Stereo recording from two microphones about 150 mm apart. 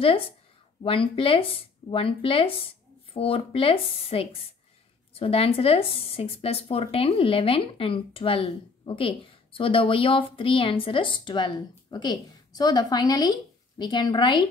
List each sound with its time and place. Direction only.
0.8 s speech: 35° left (ahead or behind)